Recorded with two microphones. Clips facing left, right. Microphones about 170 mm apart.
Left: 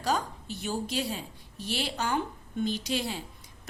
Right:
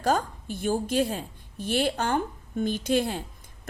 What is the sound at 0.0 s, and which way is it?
A woman's voice, 50° right (ahead or behind).